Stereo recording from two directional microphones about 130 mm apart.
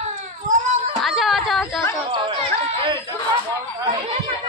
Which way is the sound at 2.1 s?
40° right (ahead or behind).